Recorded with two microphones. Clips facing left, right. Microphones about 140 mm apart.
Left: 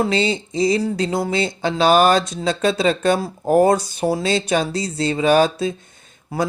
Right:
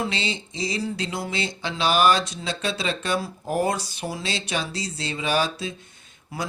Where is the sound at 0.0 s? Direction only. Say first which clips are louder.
Left 9 dB; 45° left (ahead or behind).